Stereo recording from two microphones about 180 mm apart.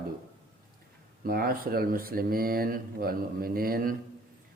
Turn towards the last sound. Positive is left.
turn(degrees=-55)  # may be behind; listen again after turning